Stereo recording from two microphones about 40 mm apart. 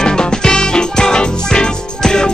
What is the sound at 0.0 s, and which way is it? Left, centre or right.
Music, centre.